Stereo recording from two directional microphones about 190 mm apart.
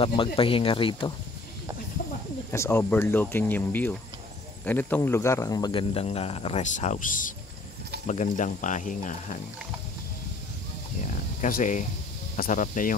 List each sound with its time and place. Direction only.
0.0 s speech: 25° left (ahead or behind)
2.5 s speech: 15° left (ahead or behind); by 9.4 s 40° left (ahead or behind)
11.4 s speech: 45° left (ahead or behind)